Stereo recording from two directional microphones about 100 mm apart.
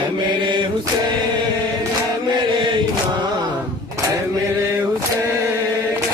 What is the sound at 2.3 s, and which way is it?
Chant, 50° right (ahead or behind).